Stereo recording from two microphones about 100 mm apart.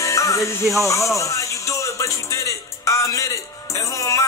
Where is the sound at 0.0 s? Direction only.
30° left (ahead or behind).